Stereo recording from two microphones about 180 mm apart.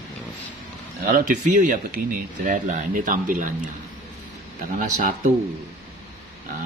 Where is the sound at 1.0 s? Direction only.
50° right (ahead or behind).